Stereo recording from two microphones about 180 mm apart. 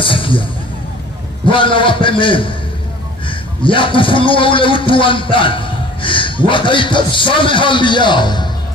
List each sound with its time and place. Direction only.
0.0 s music: 30° left (ahead or behind)
1.5 s a man's voice: 30° left (ahead or behind)